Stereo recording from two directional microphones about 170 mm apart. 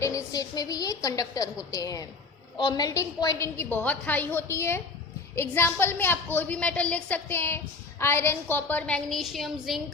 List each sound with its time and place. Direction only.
0.0 s a woman's voice: 20° left (ahead or behind); by 9.8 s centre (ahead or behind)